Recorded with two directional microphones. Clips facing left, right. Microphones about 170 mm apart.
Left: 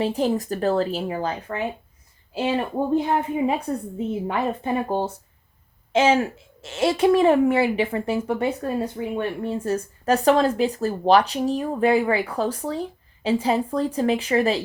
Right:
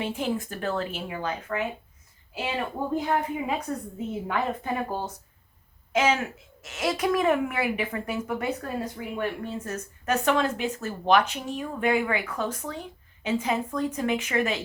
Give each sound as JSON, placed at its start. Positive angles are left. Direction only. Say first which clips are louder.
{"t": 0.0, "sound": "a woman's voice", "louder": "left 6 dB", "side_deg": 35}